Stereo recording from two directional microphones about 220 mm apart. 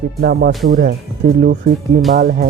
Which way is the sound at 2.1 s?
40° right (ahead or behind).